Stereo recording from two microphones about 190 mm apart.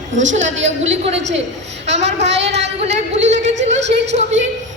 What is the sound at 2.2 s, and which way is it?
Speech, 65° right (ahead or behind).